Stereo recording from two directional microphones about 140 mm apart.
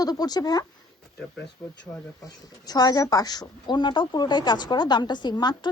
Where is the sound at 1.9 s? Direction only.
15° left (ahead or behind).